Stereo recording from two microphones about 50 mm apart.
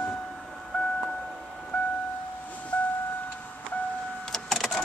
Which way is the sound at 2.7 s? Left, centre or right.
Left.